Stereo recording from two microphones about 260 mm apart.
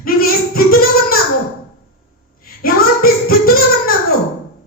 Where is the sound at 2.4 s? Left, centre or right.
Left.